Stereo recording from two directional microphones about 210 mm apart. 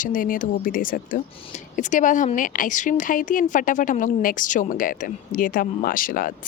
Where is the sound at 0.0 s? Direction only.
40° left (ahead or behind).